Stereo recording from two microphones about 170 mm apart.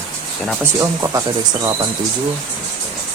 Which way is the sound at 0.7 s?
20° right (ahead or behind).